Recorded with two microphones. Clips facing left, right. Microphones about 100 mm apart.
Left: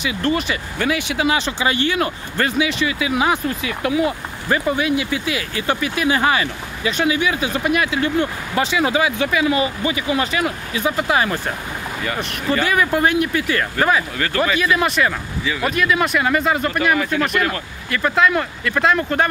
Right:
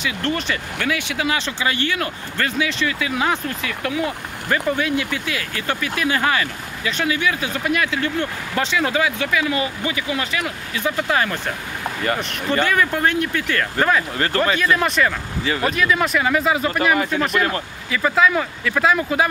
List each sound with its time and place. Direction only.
0.0 s speech: 10° left (ahead or behind)
0.7 s speech: 20° left (ahead or behind)
10.8 s speech: 15° left (ahead or behind)
12.2 s speech: centre (ahead or behind)
14.1 s speech: 35° right (ahead or behind)
14.6 s speech: 5° left (ahead or behind)